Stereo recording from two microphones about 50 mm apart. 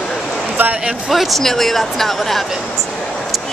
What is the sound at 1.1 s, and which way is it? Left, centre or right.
Speech, centre.